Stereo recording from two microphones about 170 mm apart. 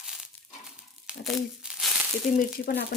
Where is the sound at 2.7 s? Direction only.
75° left (ahead or behind).